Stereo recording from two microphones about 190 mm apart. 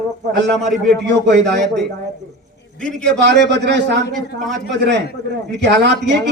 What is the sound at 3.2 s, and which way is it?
A man's voice, 65° right (ahead or behind).